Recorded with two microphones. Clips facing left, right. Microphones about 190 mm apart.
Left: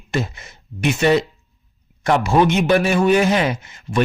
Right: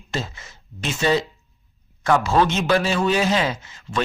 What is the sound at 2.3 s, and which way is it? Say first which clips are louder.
Speech: left 7 dB; 15° left (ahead or behind).